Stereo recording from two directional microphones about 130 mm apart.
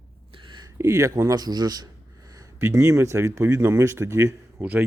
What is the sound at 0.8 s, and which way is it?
Speech, 20° right (ahead or behind).